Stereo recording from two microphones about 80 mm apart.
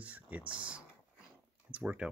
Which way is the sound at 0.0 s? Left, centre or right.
Centre.